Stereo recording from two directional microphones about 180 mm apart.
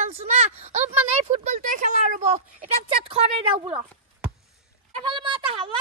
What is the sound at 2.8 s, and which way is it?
Speech, 30° right (ahead or behind).